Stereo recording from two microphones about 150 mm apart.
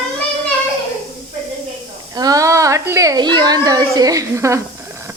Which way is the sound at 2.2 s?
25° right (ahead or behind).